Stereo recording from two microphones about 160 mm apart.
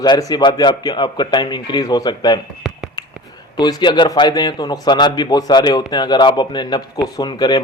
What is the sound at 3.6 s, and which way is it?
Speech, 25° left (ahead or behind).